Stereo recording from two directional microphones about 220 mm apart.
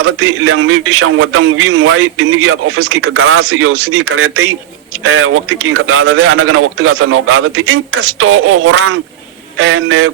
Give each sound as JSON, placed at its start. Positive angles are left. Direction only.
{"t": 0.0, "sound": "a man's voice", "side_deg": -70}